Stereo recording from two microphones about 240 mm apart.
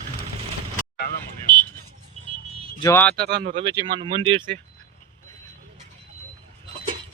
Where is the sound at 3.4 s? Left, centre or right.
Right.